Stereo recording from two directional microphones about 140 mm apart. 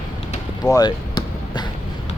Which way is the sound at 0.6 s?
30° left (ahead or behind).